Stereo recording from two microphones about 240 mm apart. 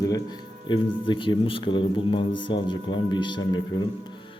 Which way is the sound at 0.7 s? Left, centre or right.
Left.